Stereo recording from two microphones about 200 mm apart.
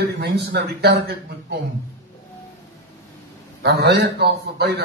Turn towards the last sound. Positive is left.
turn(degrees=-55)  # may be behind; listen again after turning